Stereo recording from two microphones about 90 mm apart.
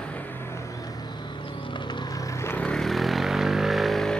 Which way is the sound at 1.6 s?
60° left (ahead or behind).